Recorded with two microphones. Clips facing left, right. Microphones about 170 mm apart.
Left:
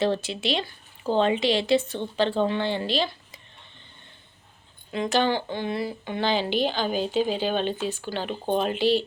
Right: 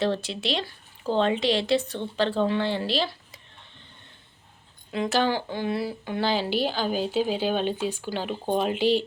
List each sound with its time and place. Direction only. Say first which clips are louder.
0.0 s speech: left 1 dB; centre (ahead or behind)